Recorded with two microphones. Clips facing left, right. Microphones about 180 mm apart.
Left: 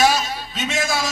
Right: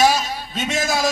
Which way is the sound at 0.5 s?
40° right (ahead or behind).